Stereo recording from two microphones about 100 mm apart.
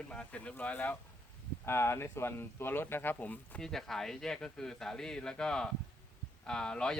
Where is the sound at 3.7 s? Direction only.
5° left (ahead or behind).